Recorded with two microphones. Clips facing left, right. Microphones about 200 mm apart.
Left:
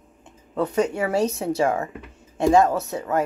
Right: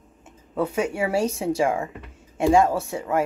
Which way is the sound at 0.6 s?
10° right (ahead or behind).